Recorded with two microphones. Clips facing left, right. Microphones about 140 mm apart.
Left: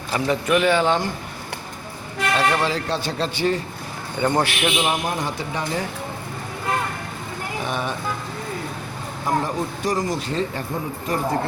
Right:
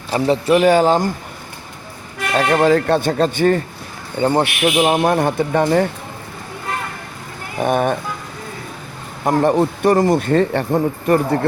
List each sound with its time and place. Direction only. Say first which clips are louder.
0.1 s speech: right 5 dB; 30° right (ahead or behind)
2.3 s speech: right 8 dB; 45° right (ahead or behind)
4.2 s speech: right 5 dB; 30° right (ahead or behind)
4.9 s speech: right 10 dB; 60° right (ahead or behind)
7.6 s speech: right 11 dB; 50° right (ahead or behind)
9.2 s speech: right 9 dB; 65° right (ahead or behind)